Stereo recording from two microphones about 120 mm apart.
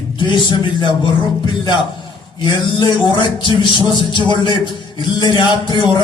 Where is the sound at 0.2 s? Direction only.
40° left (ahead or behind).